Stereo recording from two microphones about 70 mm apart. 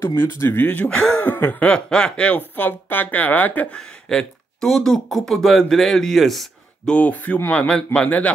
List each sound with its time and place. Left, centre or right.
0.0 s a woman's voice: left
1.7 s a woman's voice: centre
3.7 s speech: centre
6.9 s a woman's voice: left
7.6 s a woman's voice: centre